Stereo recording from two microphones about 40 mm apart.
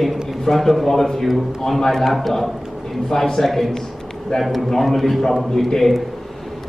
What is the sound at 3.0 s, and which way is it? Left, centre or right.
A man's voice, centre.